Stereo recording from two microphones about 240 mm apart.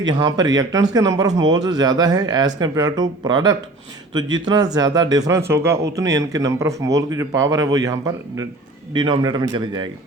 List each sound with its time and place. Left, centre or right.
0.0 s speech: centre